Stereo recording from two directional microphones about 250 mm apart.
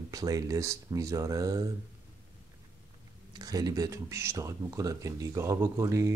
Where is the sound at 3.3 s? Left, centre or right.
Centre.